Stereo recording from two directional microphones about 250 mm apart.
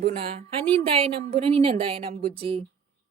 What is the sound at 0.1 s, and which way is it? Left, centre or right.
Speech, right.